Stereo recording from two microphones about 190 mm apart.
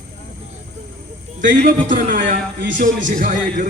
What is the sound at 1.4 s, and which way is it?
A man's voice, 45° right (ahead or behind).